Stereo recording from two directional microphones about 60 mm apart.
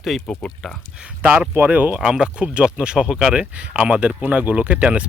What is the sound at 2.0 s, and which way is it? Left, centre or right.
Speech, centre.